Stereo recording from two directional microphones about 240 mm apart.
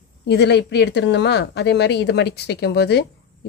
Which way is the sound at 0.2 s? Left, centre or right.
Left.